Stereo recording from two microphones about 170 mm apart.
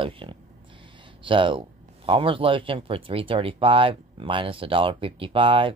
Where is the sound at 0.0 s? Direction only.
30° right (ahead or behind).